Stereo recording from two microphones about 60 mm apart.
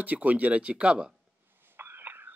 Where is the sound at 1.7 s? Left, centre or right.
Right.